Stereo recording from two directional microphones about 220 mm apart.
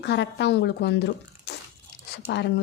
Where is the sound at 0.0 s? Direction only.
50° left (ahead or behind).